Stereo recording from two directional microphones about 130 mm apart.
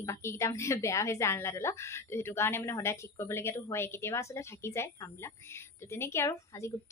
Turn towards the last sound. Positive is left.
turn(degrees=20)  # may be behind; listen again after turning